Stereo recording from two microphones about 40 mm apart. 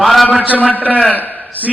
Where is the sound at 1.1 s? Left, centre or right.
Left.